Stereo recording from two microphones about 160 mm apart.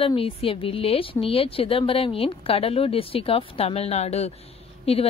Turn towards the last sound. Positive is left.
turn(degrees=40)  # may be behind; listen again after turning